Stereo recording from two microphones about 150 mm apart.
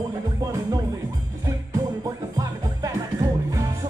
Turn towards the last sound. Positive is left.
turn(degrees=-20)  # may be behind; listen again after turning